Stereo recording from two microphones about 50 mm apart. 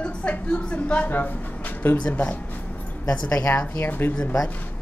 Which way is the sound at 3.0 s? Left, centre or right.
Left.